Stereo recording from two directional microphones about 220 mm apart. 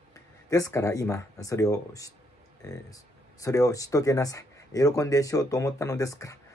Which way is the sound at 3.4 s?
15° left (ahead or behind).